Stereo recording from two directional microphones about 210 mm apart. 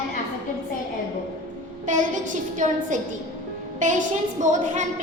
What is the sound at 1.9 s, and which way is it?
A woman's voice, 35° right (ahead or behind).